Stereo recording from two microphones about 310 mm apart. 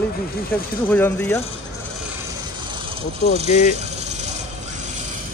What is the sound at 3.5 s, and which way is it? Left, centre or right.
Speech, left.